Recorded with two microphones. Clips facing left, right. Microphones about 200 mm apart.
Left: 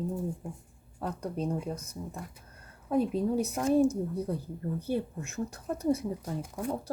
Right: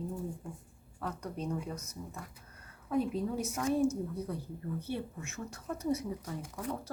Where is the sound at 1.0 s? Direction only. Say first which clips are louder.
Left 5 dB; 30° left (ahead or behind).